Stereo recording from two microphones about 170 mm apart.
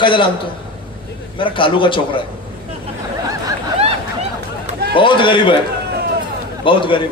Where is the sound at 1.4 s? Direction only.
30° left (ahead or behind).